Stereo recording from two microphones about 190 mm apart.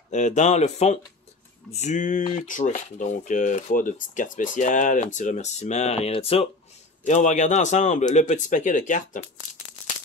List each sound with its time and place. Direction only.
0.1 s speech: 40° left (ahead or behind)